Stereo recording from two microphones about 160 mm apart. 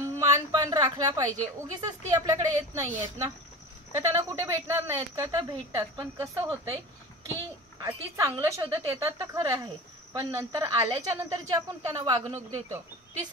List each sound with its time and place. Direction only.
0.2 s a sound: 20° right (ahead or behind)
1.7 s speech: 20° right (ahead or behind)
7.8 s speech: 20° right (ahead or behind)